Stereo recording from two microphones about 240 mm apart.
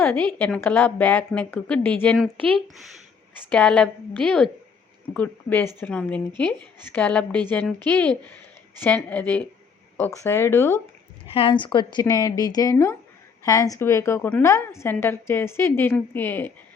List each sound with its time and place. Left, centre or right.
0.0 s a woman's voice: centre
11.3 s a woman's voice: left